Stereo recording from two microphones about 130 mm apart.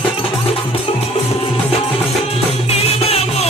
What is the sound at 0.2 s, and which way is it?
Music, 45° left (ahead or behind).